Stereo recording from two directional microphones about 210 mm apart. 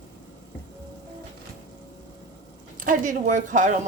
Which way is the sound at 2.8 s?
40° right (ahead or behind).